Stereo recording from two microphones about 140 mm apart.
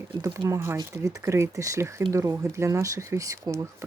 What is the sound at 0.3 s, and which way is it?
Speech, 20° right (ahead or behind).